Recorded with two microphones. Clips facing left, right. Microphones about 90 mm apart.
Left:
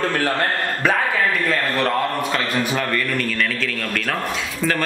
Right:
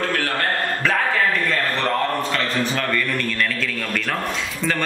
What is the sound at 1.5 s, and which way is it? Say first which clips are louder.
A man's voice: left 1 dB; 5° left (ahead or behind).